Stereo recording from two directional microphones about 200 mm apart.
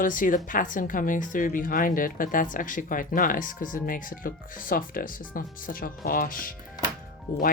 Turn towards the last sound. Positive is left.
turn(degrees=45)  # may be behind; listen again after turning